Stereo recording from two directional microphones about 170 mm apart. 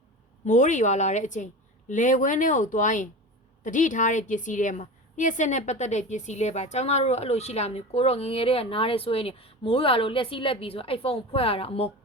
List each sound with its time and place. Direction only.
0.4 s a woman's voice: 45° left (ahead or behind)